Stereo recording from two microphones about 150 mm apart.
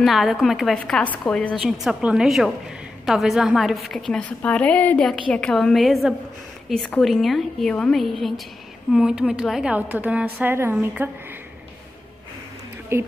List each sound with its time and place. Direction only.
0.0 s a woman's voice: centre (ahead or behind)
12.9 s a woman's voice: 15° right (ahead or behind)